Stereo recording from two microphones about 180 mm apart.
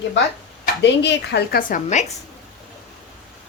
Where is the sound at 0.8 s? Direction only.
75° left (ahead or behind).